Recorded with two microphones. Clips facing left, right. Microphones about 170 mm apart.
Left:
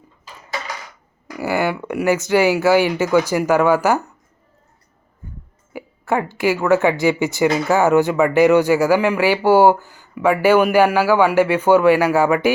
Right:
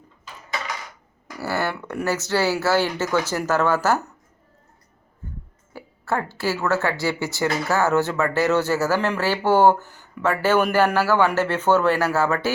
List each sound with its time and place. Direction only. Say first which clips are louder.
1.4 s speech: left 5 dB; 15° left (ahead or behind)
5.7 s speech: left 5 dB; 15° left (ahead or behind)